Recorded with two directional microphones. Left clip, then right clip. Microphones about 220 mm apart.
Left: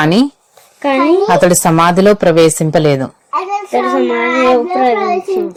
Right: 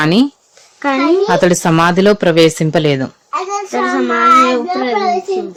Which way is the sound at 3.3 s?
15° left (ahead or behind).